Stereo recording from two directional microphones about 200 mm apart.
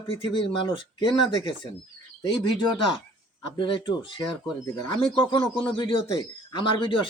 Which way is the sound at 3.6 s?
25° left (ahead or behind).